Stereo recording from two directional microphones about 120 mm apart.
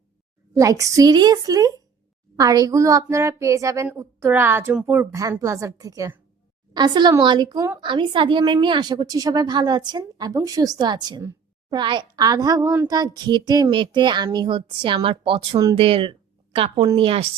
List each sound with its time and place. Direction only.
0.5 s a woman's voice: 30° right (ahead or behind); by 5.0 s 10° right (ahead or behind)
5.3 s a woman's voice: 25° right (ahead or behind)
12.6 s a woman's voice: 15° right (ahead or behind)
12.9 s a woman's voice: 35° right (ahead or behind); by 17.2 s 50° right (ahead or behind)